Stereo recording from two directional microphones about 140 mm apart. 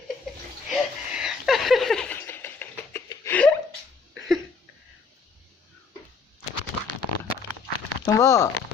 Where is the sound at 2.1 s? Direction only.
15° left (ahead or behind).